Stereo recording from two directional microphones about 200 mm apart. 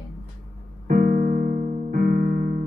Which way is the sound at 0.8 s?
45° right (ahead or behind).